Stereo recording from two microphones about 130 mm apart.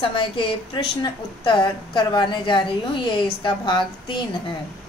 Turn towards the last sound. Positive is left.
turn(degrees=40)  # may be behind; listen again after turning